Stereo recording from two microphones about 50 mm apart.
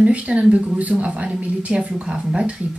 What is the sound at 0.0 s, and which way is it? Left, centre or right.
Speech, right.